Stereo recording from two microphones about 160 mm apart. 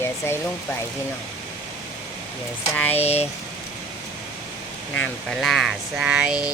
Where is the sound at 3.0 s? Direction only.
45° left (ahead or behind).